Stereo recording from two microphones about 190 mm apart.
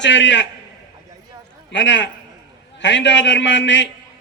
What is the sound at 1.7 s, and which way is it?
A man's voice, 70° left (ahead or behind).